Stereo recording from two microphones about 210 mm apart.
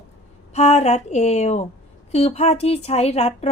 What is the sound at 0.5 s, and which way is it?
A woman's voice, 30° left (ahead or behind).